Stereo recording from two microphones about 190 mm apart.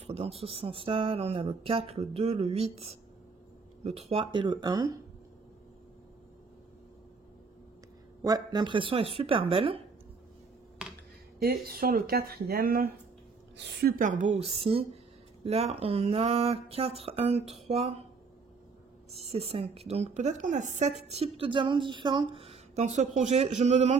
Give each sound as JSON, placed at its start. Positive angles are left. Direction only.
{"t": 0.0, "sound": "speech", "side_deg": -30}
{"t": 8.2, "sound": "speech", "side_deg": -20}
{"t": 11.3, "sound": "speech", "side_deg": -55}
{"t": 19.1, "sound": "speech", "side_deg": -30}